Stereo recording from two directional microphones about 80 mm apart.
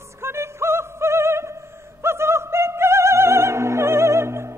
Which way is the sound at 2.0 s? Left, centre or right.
Right.